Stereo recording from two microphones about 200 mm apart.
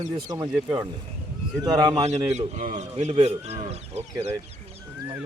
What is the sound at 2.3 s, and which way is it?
Speech, 35° right (ahead or behind).